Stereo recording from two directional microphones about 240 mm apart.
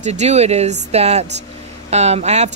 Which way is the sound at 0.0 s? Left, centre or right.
Right.